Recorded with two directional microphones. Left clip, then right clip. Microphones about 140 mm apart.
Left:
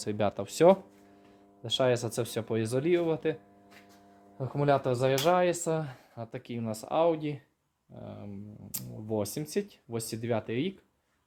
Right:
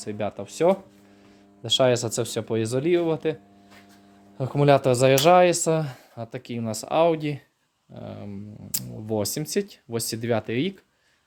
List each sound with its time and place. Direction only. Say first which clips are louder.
0.0 s speech: right 1 dB; 30° left (ahead or behind)
1.6 s speech: right 7 dB; 20° right (ahead or behind)
4.4 s speech: right 8 dB; 45° right (ahead or behind)
6.1 s speech: right 5 dB; 15° right (ahead or behind)
6.9 s speech: right 6 dB; 35° right (ahead or behind)